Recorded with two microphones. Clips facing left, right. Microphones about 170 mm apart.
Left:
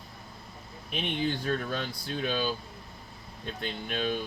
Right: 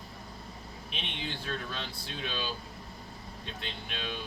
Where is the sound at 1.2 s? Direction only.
50° left (ahead or behind).